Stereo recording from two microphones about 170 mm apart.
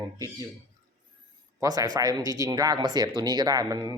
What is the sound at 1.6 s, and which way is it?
Speech, 20° right (ahead or behind).